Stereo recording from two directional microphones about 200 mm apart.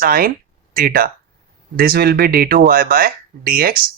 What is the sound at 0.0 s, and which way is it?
Speech, 45° right (ahead or behind).